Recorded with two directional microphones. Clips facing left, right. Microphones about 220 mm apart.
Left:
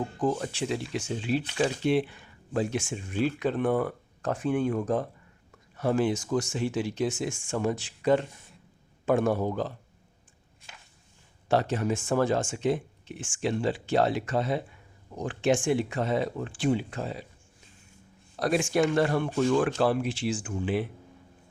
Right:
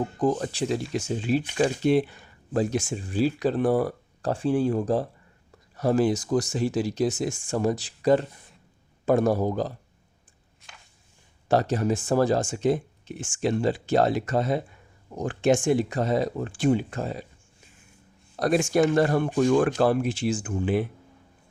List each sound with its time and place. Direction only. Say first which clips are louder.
0.2 s speech: right 3 dB; 40° right (ahead or behind)
11.4 s speech: right 3 dB; 40° right (ahead or behind)
18.3 s speech: right 3 dB; 45° right (ahead or behind)